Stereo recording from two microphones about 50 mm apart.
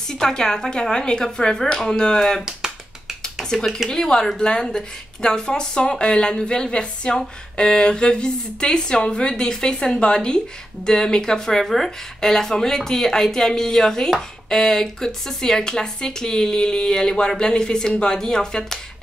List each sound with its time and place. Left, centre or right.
0.1 s speech: centre
2.4 s a sound: centre
3.9 s speech: centre